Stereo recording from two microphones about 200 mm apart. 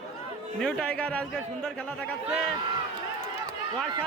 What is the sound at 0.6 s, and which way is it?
A man's voice, 5° left (ahead or behind).